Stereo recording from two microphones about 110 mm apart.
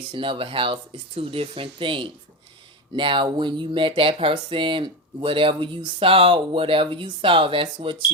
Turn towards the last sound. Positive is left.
turn(degrees=-50)  # may be behind; listen again after turning